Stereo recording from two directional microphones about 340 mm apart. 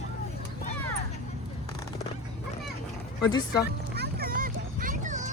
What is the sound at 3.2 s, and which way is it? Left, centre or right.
Speech, centre.